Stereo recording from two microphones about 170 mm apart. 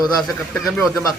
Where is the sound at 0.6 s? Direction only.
Centre (ahead or behind).